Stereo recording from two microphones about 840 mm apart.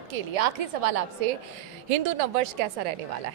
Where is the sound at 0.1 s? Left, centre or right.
Right.